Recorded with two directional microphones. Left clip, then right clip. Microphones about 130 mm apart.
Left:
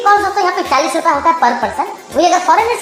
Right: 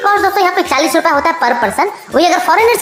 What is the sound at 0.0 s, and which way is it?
A woman's voice, 25° right (ahead or behind).